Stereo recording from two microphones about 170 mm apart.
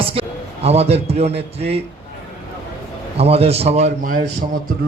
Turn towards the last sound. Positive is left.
turn(degrees=-55)  # may be behind; listen again after turning